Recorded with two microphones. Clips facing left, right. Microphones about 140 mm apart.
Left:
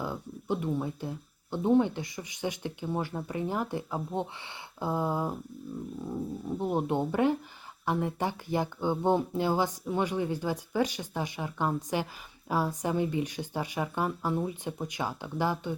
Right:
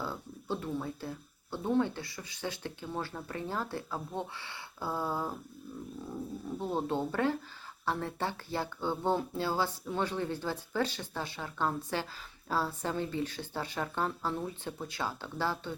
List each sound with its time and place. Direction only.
0.0 s speech: 15° left (ahead or behind)
6.6 s speech: 15° left (ahead or behind)